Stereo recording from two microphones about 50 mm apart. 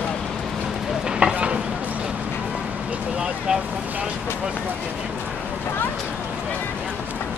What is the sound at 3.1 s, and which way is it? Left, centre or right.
Vehicle, centre.